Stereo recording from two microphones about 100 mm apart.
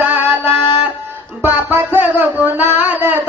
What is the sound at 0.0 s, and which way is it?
Music, 20° right (ahead or behind).